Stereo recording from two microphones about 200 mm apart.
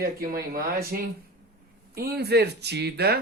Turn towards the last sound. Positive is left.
turn(degrees=-55)  # may be behind; listen again after turning